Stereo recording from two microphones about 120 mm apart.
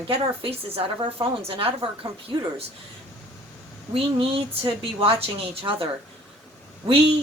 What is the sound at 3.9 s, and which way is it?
A woman's voice, 55° right (ahead or behind).